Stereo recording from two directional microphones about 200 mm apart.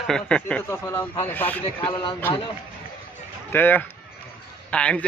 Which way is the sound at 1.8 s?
25° left (ahead or behind).